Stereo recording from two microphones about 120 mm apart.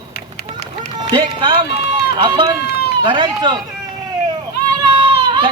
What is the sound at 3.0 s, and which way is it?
Speech, 40° right (ahead or behind).